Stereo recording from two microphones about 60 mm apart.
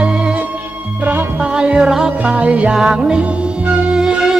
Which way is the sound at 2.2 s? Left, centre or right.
Right.